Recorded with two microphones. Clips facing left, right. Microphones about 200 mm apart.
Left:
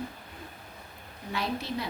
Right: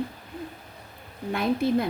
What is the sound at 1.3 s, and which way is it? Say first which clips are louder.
Speech: right 9 dB; 50° right (ahead or behind).